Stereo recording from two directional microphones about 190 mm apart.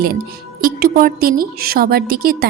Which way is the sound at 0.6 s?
50° right (ahead or behind).